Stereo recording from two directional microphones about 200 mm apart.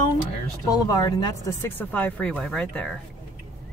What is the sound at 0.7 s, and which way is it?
Speech, 20° left (ahead or behind).